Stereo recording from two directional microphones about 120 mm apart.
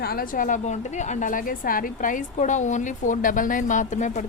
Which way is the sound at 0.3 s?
90° left.